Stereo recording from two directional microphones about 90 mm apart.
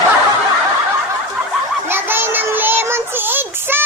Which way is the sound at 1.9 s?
25° right (ahead or behind).